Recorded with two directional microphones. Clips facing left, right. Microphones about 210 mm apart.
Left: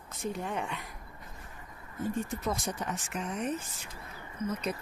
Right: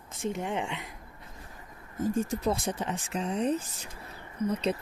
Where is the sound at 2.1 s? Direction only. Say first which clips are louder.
Right 6 dB; 35° right (ahead or behind).